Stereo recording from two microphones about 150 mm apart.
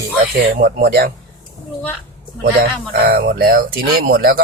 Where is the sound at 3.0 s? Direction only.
90° right.